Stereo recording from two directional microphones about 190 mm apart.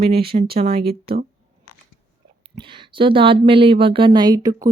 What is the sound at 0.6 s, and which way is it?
Speech, 30° right (ahead or behind).